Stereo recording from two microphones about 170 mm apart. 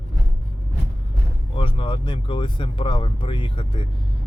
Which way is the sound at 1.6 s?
30° left (ahead or behind).